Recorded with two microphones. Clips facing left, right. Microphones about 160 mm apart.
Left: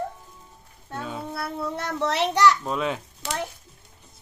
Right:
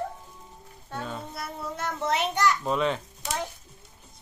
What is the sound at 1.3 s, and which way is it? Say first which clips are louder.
Child singing: left 6 dB; 65° left (ahead or behind).